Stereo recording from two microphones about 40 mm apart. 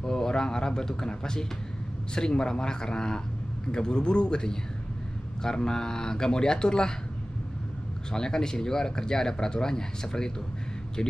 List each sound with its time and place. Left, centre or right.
0.0 s a man's voice: centre
8.1 s speech: centre